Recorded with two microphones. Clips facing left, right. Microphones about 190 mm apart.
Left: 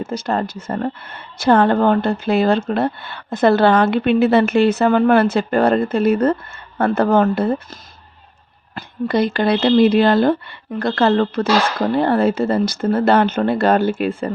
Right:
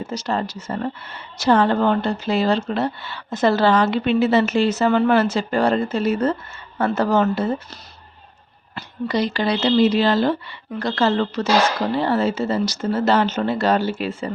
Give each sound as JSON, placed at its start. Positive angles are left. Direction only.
{"t": 0.0, "sound": "speech", "side_deg": 55}
{"t": 8.7, "sound": "speech", "side_deg": 55}